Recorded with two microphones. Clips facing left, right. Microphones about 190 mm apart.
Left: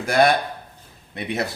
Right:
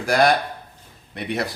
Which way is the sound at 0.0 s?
25° left (ahead or behind).